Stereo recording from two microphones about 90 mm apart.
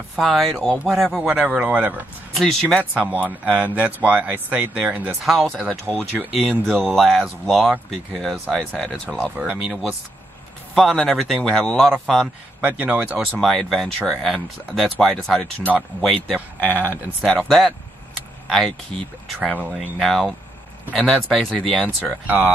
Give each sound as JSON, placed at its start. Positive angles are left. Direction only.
{"t": 0.1, "sound": "speech", "side_deg": 5}
{"t": 2.3, "sound": "speech", "side_deg": 5}
{"t": 2.8, "sound": "a man's voice", "side_deg": -15}
{"t": 6.6, "sound": "speech", "side_deg": 0}
{"t": 9.4, "sound": "a man's voice", "side_deg": -10}
{"t": 12.6, "sound": "a man's voice", "side_deg": -20}
{"t": 13.2, "sound": "speech", "side_deg": 5}
{"t": 16.7, "sound": "speech", "side_deg": -20}
{"t": 17.3, "sound": "speech", "side_deg": 10}
{"t": 20.0, "sound": "speech", "side_deg": 0}
{"t": 21.8, "sound": "speech", "side_deg": -20}